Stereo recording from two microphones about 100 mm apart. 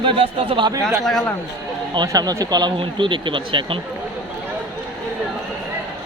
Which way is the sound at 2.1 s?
35° right (ahead or behind).